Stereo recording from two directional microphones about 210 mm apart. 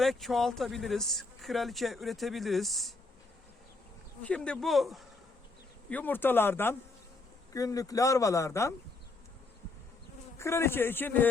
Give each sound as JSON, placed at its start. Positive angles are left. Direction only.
{"t": 0.0, "sound": "speech", "side_deg": 0}
{"t": 4.2, "sound": "speech", "side_deg": 5}
{"t": 10.3, "sound": "speech", "side_deg": 10}